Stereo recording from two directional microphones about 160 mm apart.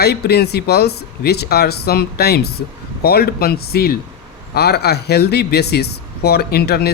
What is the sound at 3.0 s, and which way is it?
Speech, 75° left (ahead or behind).